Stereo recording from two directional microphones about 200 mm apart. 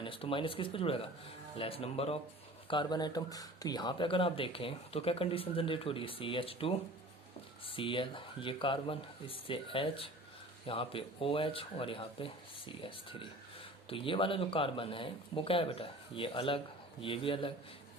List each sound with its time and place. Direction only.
0.0 s speech: 25° left (ahead or behind)